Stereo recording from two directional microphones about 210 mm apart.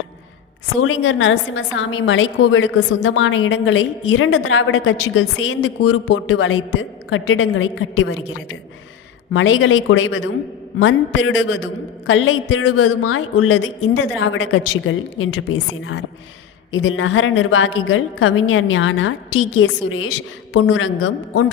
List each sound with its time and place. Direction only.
0.8 s a woman's voice: 70° left (ahead or behind)
9.3 s a man's voice: 65° left (ahead or behind); by 13.5 s 90° left
14.2 s a man's voice: 60° left (ahead or behind)